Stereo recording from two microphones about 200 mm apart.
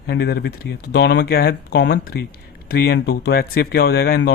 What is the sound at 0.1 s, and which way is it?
Speech, 55° left (ahead or behind).